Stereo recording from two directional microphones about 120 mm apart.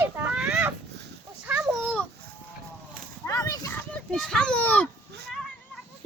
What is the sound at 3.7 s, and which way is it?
A child's voice, 5° left (ahead or behind).